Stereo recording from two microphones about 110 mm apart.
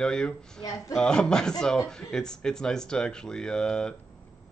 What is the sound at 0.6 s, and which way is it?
Speech, 30° left (ahead or behind).